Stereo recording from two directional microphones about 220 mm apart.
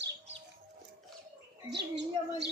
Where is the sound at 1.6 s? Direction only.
50° right (ahead or behind).